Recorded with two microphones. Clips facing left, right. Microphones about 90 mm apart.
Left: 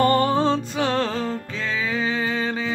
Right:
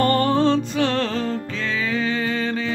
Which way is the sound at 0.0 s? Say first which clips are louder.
Right 1 dB; 15° left (ahead or behind).